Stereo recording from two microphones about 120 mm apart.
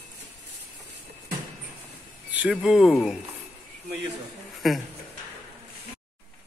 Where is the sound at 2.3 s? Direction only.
10° right (ahead or behind).